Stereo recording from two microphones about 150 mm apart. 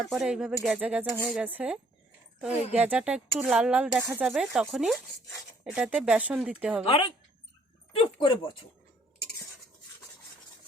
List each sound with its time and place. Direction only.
0.0 s speech: 5° right (ahead or behind)
4.3 s speech: 5° right (ahead or behind)
6.8 s speech: 35° left (ahead or behind)